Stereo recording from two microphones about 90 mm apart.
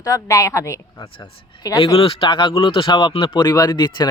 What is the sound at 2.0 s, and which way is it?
Speech, 85° left.